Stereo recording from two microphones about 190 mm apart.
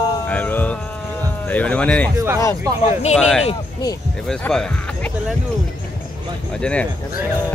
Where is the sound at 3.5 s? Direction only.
20° left (ahead or behind).